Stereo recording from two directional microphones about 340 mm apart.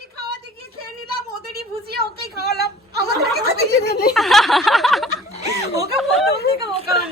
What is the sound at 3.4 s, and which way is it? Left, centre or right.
Snicker, right.